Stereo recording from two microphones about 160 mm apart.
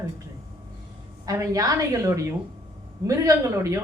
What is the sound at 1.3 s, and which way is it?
A woman's voice, 20° right (ahead or behind).